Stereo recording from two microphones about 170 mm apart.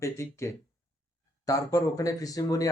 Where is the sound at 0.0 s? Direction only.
15° left (ahead or behind).